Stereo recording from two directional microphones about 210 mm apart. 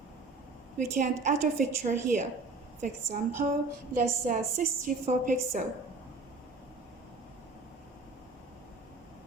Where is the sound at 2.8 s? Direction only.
40° right (ahead or behind).